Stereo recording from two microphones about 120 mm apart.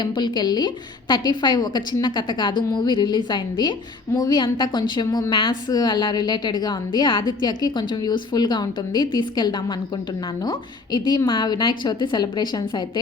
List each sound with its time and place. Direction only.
0.0 s a woman's voice: 40° left (ahead or behind)